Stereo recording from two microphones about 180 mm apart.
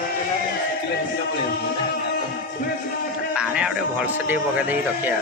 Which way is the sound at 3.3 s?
5° right (ahead or behind).